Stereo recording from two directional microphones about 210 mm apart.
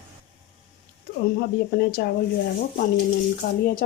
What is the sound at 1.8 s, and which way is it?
Speech, 50° left (ahead or behind).